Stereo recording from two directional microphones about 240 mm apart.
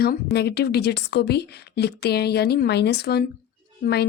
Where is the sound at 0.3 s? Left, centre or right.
Left.